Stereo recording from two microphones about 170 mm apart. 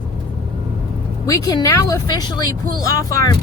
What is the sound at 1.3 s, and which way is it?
Speech, 20° left (ahead or behind).